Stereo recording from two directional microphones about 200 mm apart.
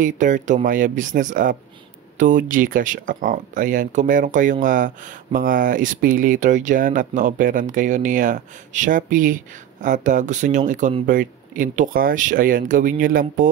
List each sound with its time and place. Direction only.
0.0 s speech: 40° right (ahead or behind)